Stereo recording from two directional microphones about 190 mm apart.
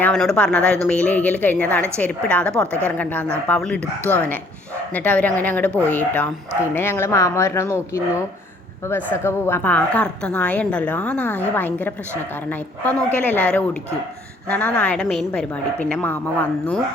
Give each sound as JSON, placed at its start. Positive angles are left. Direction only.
{"t": 0.0, "sound": "a woman's voice", "side_deg": 5}
{"t": 9.0, "sound": "a woman's voice", "side_deg": 10}